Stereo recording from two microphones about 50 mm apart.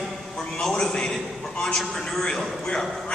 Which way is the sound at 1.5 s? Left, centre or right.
Centre.